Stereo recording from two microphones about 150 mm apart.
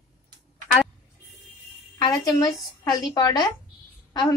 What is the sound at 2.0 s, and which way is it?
A woman's voice, 25° left (ahead or behind).